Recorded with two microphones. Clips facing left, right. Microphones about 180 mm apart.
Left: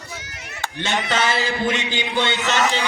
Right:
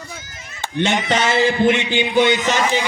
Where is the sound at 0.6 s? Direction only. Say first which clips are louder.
Right 5 dB; 20° right (ahead or behind).